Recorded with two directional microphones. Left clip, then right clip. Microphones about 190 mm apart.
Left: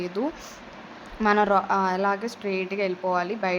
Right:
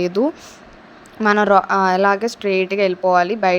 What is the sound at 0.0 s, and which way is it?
A woman's voice, 35° right (ahead or behind).